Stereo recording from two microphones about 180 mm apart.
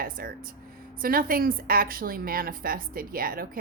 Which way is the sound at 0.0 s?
55° right (ahead or behind).